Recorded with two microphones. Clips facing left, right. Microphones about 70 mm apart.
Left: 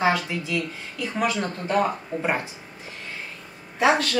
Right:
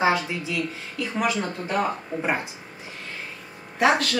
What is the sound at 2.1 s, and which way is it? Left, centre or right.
Speech, centre.